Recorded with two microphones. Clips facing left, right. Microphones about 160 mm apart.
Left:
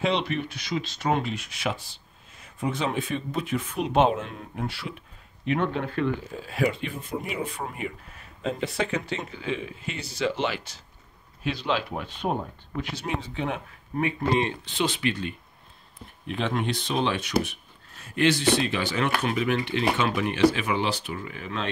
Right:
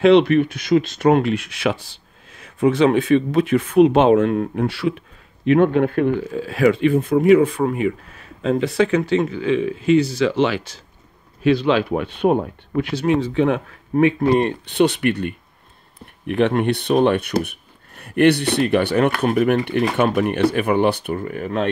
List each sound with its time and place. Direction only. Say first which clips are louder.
0.0 s speech: right 14 dB; 65° right (ahead or behind); by 4.9 s 85° right
5.6 s speech: right 11 dB; 55° right (ahead or behind)
6.3 s speech: right 10 dB; 90° right
11.4 s speech: right 11 dB; 70° right (ahead or behind)
14.3 s speech: right 7 dB; 55° right (ahead or behind)